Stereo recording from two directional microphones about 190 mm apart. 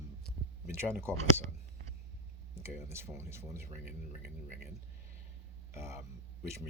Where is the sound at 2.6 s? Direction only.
15° right (ahead or behind).